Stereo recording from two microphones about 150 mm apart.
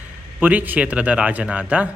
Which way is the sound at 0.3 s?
10° right (ahead or behind).